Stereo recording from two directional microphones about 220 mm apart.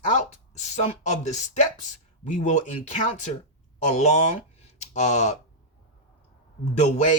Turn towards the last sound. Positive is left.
turn(degrees=30)  # may be behind; listen again after turning